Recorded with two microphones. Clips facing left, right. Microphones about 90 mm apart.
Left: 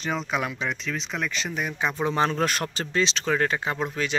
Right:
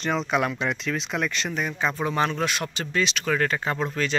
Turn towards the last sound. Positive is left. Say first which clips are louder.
# right 1 dB
turn(degrees=15)  # may be behind; listen again after turning